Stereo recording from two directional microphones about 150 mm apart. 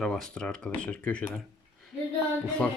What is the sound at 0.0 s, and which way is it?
Speech, 5° left (ahead or behind).